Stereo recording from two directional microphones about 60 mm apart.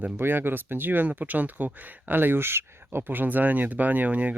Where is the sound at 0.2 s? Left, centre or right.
Right.